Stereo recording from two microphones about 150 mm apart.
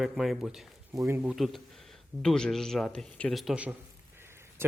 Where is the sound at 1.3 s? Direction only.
Centre (ahead or behind).